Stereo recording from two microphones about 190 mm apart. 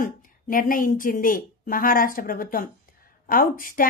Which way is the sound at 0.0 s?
45° left (ahead or behind).